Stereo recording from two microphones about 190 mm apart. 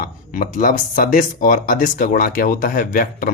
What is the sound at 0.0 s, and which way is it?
Speech, 45° left (ahead or behind).